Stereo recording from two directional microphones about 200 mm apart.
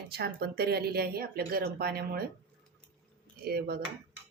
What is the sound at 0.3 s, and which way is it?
Speech, 50° right (ahead or behind).